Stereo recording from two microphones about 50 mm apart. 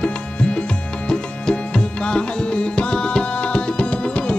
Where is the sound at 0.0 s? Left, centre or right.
Left.